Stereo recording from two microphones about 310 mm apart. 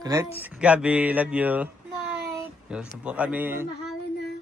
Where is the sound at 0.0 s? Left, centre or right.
Centre.